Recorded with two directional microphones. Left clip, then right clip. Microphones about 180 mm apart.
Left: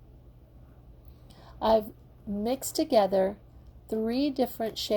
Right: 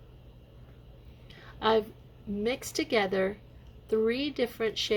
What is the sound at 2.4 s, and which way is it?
A woman's voice, 35° left (ahead or behind).